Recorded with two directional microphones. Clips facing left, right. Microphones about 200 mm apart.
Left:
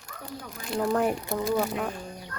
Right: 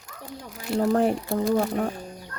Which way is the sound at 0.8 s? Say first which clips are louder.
Right 4 dB; 30° right (ahead or behind).